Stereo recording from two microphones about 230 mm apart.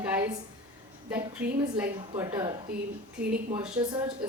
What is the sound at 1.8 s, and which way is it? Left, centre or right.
Speech, centre.